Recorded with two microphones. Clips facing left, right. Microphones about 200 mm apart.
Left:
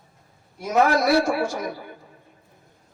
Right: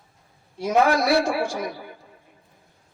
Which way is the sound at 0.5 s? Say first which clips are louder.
Even; 30° right (ahead or behind).